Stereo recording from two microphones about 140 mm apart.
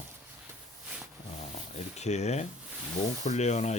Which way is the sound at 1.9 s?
50° left (ahead or behind).